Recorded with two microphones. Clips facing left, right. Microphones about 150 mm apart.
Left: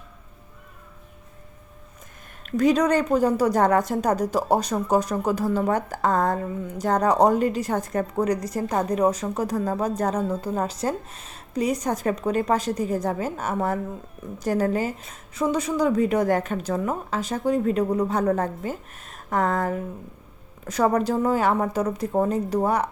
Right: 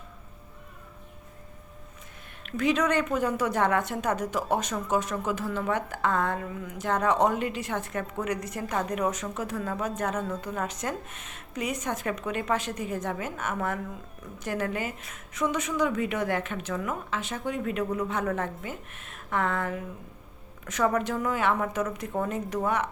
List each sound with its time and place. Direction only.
2.5 s a woman's voice: 40° left (ahead or behind)